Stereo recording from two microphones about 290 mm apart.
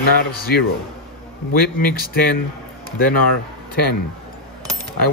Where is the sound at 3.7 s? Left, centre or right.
Left.